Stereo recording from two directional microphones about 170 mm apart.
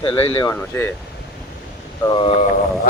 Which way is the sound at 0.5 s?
15° left (ahead or behind).